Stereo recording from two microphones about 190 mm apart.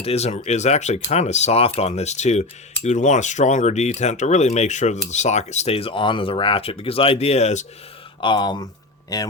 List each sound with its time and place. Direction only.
0.0 s speech: 35° left (ahead or behind)
8.2 s speech: 25° left (ahead or behind)